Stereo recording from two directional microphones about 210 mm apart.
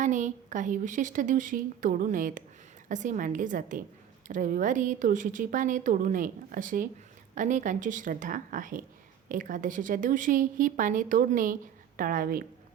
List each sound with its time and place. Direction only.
0.0 s a woman's voice: 35° right (ahead or behind)